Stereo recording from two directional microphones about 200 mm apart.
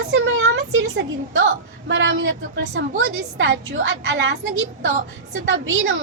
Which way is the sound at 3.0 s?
80° right.